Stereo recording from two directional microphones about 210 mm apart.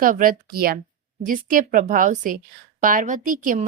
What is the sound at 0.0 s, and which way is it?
A woman's voice, 40° right (ahead or behind).